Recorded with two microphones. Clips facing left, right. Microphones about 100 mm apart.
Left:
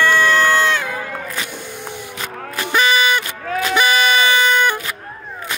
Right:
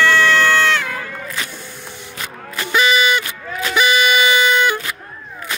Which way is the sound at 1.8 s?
55° left (ahead or behind).